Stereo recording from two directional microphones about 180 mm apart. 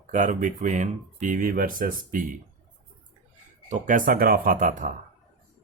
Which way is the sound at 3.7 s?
45° right (ahead or behind).